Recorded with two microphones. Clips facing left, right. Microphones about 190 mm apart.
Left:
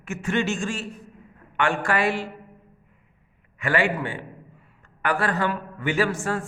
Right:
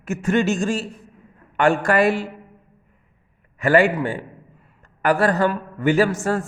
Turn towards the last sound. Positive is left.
turn(degrees=-40)  # may be behind; listen again after turning